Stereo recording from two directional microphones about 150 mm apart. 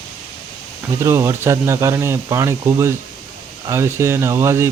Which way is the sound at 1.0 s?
15° right (ahead or behind).